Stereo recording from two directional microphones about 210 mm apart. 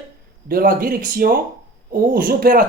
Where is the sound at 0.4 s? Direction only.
45° right (ahead or behind).